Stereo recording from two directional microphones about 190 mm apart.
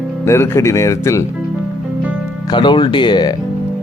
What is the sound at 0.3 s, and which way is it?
Speech, 15° left (ahead or behind).